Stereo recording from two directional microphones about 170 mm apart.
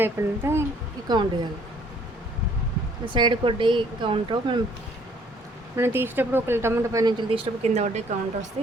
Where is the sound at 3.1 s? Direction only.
25° right (ahead or behind).